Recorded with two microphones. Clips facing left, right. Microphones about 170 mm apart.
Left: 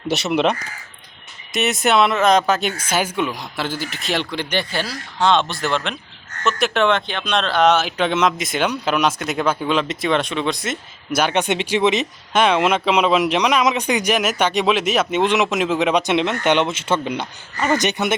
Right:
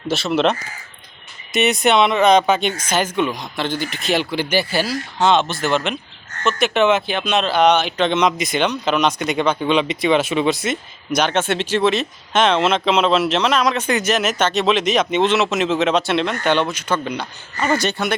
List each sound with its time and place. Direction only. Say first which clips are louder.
0.1 s speech: right 1 dB; 20° left (ahead or behind)
1.5 s speech: right 2 dB; centre (ahead or behind); by 18.2 s 20° left (ahead or behind)